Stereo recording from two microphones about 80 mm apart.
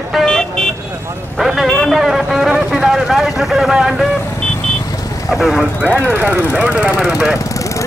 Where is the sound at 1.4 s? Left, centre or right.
Centre.